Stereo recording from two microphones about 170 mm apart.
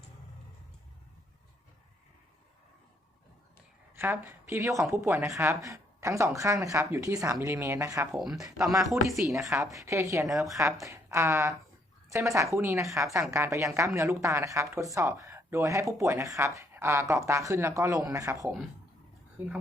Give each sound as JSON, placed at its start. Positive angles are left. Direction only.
{"t": 3.9, "sound": "a woman's voice", "side_deg": -10}
{"t": 8.2, "sound": "a woman's voice", "side_deg": 0}
{"t": 8.6, "sound": "speech", "side_deg": -20}
{"t": 8.9, "sound": "a woman's voice", "side_deg": 0}
{"t": 9.4, "sound": "a woman's voice", "side_deg": -20}